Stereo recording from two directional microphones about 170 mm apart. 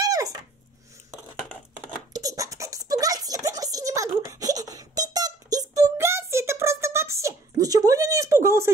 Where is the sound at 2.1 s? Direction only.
20° right (ahead or behind).